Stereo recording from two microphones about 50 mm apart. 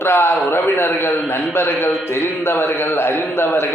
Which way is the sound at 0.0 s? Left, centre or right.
Left.